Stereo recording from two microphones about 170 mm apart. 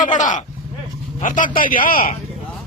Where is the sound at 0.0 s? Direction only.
50° left (ahead or behind).